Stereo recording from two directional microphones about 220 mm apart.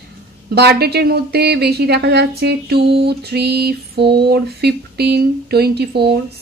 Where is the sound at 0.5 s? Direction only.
45° right (ahead or behind).